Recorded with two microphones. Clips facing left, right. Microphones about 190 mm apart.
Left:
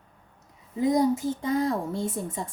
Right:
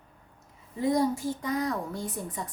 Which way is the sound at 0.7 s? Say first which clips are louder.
Left 3 dB; 20° left (ahead or behind).